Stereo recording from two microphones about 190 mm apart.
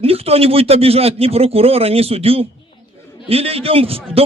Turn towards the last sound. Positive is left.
turn(degrees=-30)  # may be behind; listen again after turning